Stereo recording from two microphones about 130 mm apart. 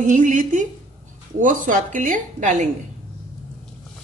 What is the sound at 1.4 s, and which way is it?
A woman's voice, 90° right.